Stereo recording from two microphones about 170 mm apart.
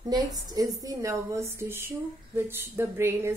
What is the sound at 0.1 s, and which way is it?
A woman's voice, 20° right (ahead or behind).